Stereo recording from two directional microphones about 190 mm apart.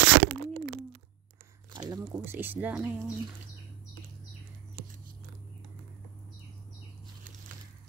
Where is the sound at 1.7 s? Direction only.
20° right (ahead or behind).